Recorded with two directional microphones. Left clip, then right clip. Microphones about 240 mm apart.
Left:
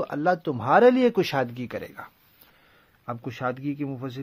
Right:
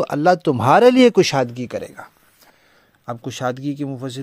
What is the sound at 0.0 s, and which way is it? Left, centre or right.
A man's voice, right.